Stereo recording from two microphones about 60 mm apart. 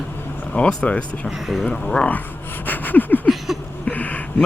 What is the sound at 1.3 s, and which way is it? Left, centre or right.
Speech, centre.